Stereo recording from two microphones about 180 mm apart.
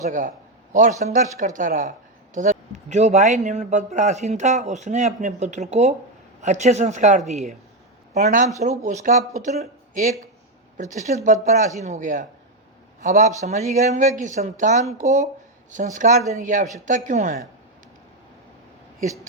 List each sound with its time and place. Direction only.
0.0 s a man's voice: 45° right (ahead or behind)